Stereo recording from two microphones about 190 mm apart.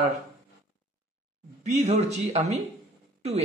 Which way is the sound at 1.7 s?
35° right (ahead or behind).